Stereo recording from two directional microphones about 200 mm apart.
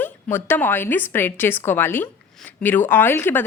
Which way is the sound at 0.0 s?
10° left (ahead or behind).